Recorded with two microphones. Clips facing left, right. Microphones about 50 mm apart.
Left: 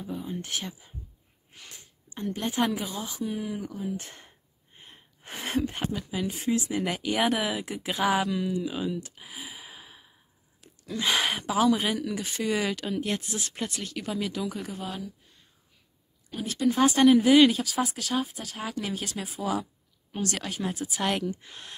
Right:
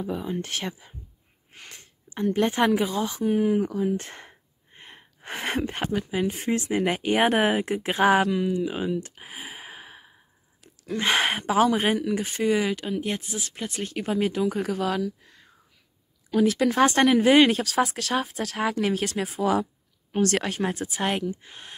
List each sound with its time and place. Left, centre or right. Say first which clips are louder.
0.0 s speech: right 5 dB; right
1.5 s speech: right 3 dB; right
8.3 s speech: right 4 dB; right
9.0 s sigh: right 3 dB; right
10.9 s speech: right 3 dB; right
12.4 s speech: right 4 dB; centre
13.7 s speech: right 5 dB; right
14.7 s speech: right 10 dB; right
16.6 s speech: left 3 dB; right
20.9 s speech: right 2 dB; right